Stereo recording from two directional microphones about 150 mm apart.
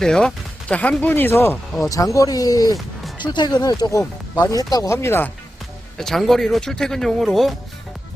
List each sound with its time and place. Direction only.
0.0 s speech: 5° left (ahead or behind)
6.0 s speech: centre (ahead or behind)